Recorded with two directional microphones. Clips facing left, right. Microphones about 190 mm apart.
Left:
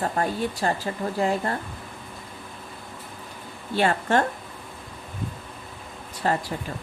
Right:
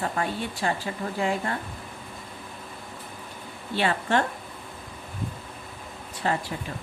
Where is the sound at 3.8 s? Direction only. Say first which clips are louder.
Left 3 dB; 45° left (ahead or behind).